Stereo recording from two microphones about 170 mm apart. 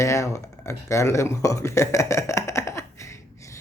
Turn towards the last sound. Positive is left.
turn(degrees=15)  # may be behind; listen again after turning